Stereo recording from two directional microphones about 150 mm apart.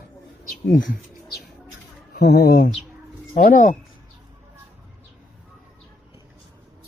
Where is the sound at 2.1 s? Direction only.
90° left.